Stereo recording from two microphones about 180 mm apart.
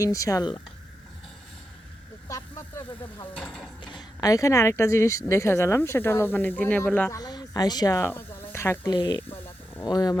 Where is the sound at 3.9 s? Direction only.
20° left (ahead or behind).